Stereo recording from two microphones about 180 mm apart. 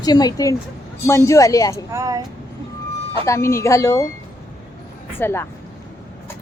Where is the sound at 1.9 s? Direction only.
15° right (ahead or behind).